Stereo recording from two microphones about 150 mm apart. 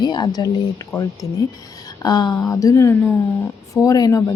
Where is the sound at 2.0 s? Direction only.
25° left (ahead or behind).